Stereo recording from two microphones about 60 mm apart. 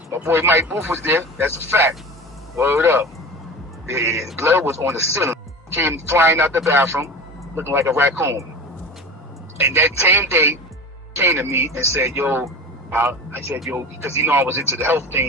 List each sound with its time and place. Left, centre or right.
0.3 s speech: right
9.6 s a man's voice: right